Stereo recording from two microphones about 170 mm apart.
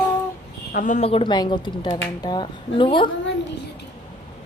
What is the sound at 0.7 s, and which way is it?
Speech, 50° left (ahead or behind).